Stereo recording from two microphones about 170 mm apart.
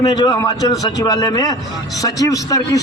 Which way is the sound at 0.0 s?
25° left (ahead or behind).